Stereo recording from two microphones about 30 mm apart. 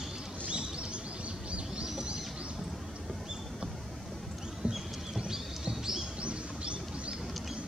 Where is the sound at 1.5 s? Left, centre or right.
Right.